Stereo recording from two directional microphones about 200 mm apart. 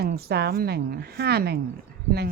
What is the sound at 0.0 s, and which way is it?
Speech, 50° right (ahead or behind).